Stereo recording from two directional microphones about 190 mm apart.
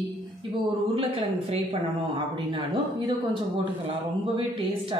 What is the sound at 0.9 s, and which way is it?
Speech, 30° right (ahead or behind).